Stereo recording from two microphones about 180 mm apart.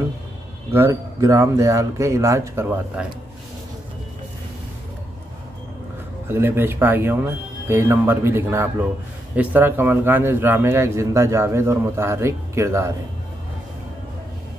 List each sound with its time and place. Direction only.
0.7 s a man's voice: 15° right (ahead or behind)
6.2 s a man's voice: 10° right (ahead or behind)